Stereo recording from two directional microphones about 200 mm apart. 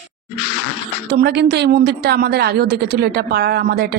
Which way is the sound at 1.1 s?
55° right (ahead or behind).